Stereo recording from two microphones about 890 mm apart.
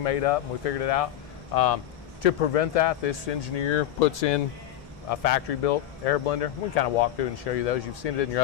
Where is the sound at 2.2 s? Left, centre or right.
Left.